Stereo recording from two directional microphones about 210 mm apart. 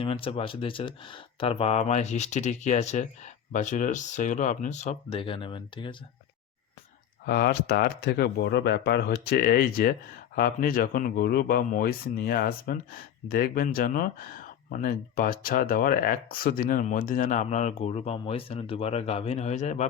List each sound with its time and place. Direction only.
0.0 s speech: 25° left (ahead or behind)
7.3 s speech: 50° left (ahead or behind); by 19.8 s 35° left (ahead or behind)